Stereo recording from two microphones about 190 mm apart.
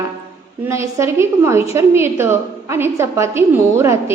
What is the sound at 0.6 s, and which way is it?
A woman's voice, 15° right (ahead or behind).